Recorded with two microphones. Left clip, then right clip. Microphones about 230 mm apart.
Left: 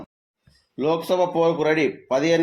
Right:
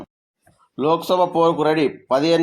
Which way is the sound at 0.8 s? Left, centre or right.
Right.